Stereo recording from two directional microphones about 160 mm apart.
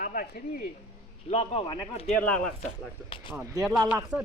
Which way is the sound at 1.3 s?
45° left (ahead or behind).